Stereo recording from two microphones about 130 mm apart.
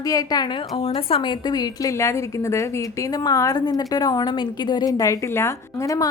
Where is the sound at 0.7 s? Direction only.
45° left (ahead or behind).